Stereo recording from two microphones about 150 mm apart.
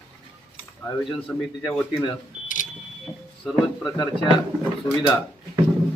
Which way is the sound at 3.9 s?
25° left (ahead or behind).